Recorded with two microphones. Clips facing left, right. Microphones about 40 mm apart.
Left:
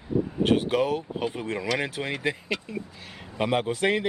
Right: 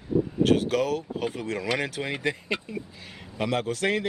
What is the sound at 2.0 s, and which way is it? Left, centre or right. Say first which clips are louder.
Speech: even; centre.